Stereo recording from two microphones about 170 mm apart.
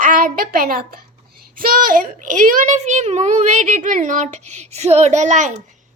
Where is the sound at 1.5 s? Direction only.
55° right (ahead or behind).